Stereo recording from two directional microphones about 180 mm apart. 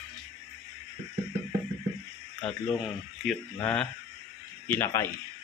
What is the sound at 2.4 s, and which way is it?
A man's voice, 5° left (ahead or behind).